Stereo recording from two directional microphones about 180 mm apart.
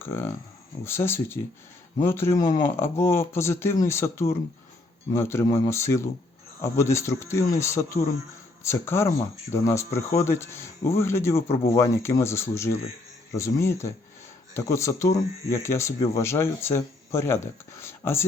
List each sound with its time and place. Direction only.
0.0 s speech: 15° left (ahead or behind)